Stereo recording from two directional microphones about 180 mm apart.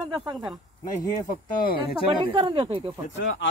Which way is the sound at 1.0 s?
25° left (ahead or behind).